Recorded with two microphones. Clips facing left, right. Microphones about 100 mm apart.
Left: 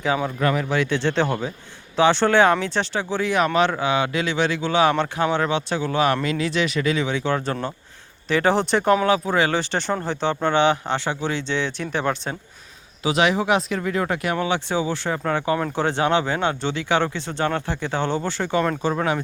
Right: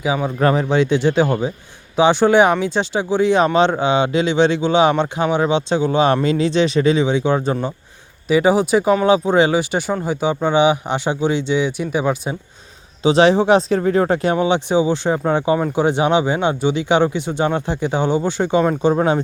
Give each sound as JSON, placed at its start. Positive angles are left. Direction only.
{"t": 0.0, "sound": "speech", "side_deg": -10}
{"t": 0.3, "sound": "speech", "side_deg": -35}
{"t": 0.7, "sound": "speech", "side_deg": -20}
{"t": 9.0, "sound": "speech", "side_deg": -20}
{"t": 13.0, "sound": "speech", "side_deg": -30}
{"t": 14.3, "sound": "speech", "side_deg": -20}